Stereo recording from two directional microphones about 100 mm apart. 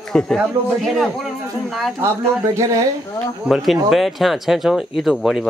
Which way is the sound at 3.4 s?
Centre (ahead or behind).